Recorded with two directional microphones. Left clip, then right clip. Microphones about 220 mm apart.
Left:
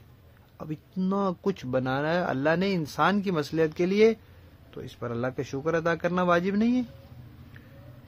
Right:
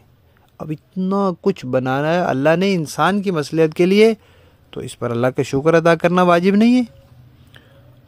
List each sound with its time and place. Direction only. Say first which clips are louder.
0.6 s a man's voice: right 8 dB; 35° right (ahead or behind)